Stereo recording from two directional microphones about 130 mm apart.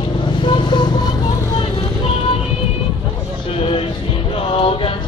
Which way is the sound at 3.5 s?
45° left (ahead or behind).